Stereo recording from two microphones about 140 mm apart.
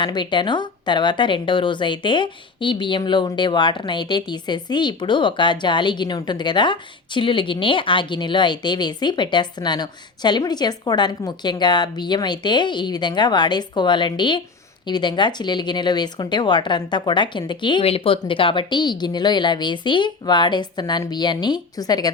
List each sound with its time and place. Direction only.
0.0 s speech: 35° left (ahead or behind)